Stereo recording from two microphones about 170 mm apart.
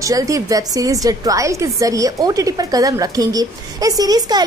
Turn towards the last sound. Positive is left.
turn(degrees=-20)  # may be behind; listen again after turning